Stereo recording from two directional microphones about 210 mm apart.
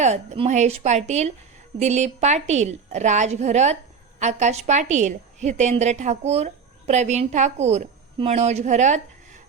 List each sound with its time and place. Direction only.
0.0 s a woman's voice: 30° right (ahead or behind)